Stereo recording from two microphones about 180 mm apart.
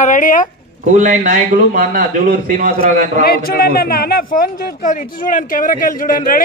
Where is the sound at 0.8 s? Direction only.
45° right (ahead or behind).